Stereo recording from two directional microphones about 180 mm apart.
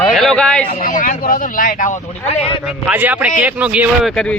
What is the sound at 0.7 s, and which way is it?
A man's voice, 45° left (ahead or behind).